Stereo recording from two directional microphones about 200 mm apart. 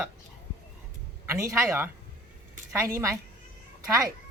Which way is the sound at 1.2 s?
15° right (ahead or behind).